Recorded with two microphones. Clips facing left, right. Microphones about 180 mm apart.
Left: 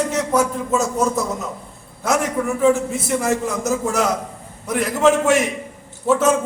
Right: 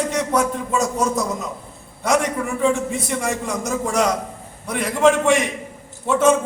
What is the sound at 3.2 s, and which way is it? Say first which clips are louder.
A man's voice: left 3 dB; 5° left (ahead or behind).